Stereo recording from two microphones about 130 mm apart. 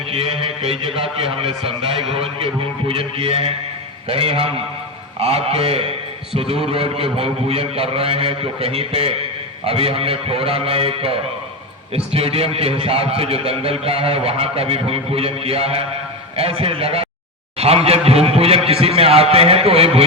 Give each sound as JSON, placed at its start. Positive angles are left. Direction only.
{"t": 0.1, "sound": "a man's voice", "side_deg": -45}